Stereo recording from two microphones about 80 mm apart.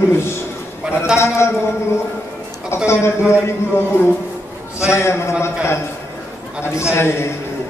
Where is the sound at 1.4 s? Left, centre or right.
Left.